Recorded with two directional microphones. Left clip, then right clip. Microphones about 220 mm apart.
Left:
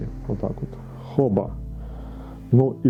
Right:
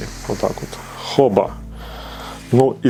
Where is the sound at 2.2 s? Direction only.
10° right (ahead or behind).